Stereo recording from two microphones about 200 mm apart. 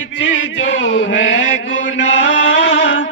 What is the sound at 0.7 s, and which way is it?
Mantra, 70° left (ahead or behind).